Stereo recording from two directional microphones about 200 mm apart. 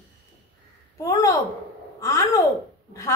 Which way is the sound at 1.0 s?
15° left (ahead or behind).